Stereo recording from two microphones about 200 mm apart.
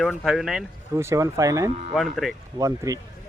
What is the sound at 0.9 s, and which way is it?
Speech, 15° right (ahead or behind).